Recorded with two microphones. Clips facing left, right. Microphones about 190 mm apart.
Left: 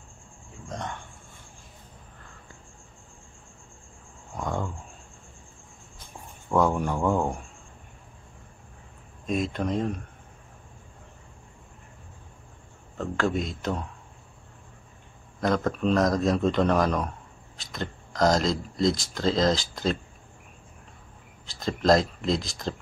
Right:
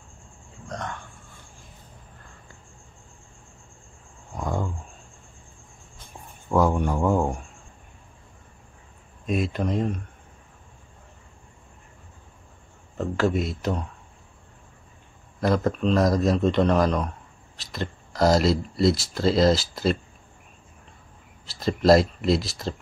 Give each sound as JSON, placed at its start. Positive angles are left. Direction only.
{"t": 0.7, "sound": "a sound", "side_deg": 20}
{"t": 4.4, "sound": "a sound", "side_deg": -5}
{"t": 6.5, "sound": "speech", "side_deg": 0}
{"t": 9.2, "sound": "speech", "side_deg": -5}
{"t": 12.9, "sound": "speech", "side_deg": -5}
{"t": 15.4, "sound": "speech", "side_deg": -5}
{"t": 21.5, "sound": "speech", "side_deg": -5}